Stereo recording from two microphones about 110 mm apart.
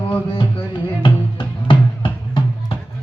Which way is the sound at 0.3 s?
50° left (ahead or behind).